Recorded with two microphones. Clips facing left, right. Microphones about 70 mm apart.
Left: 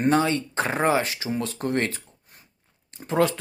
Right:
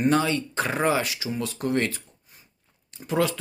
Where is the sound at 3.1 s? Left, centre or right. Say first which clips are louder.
Left 2 dB; left.